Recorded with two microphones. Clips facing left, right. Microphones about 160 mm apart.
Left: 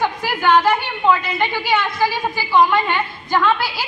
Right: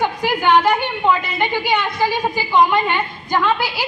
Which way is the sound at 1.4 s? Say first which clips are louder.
Even; 15° right (ahead or behind).